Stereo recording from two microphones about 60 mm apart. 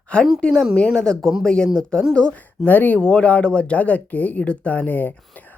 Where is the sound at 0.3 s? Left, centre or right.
Centre.